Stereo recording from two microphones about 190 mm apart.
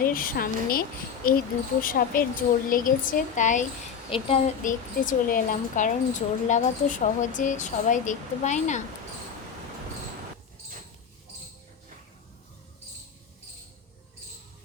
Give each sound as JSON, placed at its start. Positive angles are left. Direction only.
{"t": 0.0, "sound": "a woman's voice", "side_deg": 50}
{"t": 4.6, "sound": "speech", "side_deg": 45}